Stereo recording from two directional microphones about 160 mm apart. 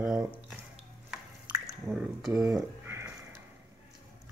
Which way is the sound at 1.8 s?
5° right (ahead or behind).